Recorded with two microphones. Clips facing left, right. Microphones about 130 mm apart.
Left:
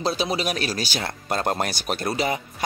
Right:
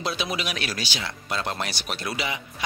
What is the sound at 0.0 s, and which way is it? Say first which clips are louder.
Speech: left 5 dB; 35° left (ahead or behind).